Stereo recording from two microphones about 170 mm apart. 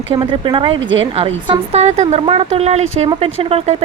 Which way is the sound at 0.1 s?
30° right (ahead or behind).